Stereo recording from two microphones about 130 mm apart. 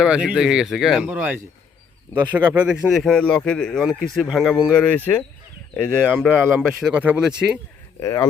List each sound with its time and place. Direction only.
0.0 s speech: 5° right (ahead or behind); by 5.2 s 10° left (ahead or behind)
6.1 s speech: 5° right (ahead or behind)
7.9 s speech: 25° left (ahead or behind)